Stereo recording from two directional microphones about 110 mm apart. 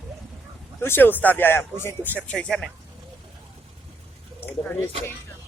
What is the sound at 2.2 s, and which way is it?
Speech, 10° left (ahead or behind).